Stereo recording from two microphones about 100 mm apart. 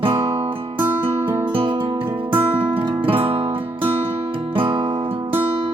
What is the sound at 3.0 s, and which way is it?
Music, 65° right (ahead or behind).